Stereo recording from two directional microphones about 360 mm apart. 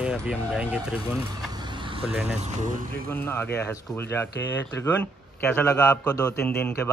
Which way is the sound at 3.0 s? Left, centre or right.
Centre.